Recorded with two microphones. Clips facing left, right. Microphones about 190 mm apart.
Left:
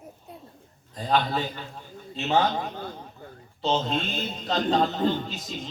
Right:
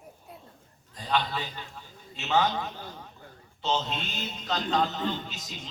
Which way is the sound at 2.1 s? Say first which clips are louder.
Left 3 dB; 35° left (ahead or behind).